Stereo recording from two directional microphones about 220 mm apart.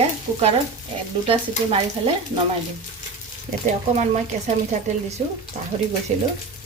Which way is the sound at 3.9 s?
30° right (ahead or behind).